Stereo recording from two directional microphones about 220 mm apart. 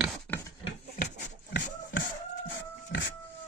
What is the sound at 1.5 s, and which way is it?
Beatboxing, 55° left (ahead or behind).